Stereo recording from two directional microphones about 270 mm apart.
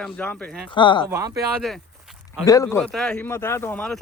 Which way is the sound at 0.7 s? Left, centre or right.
Centre.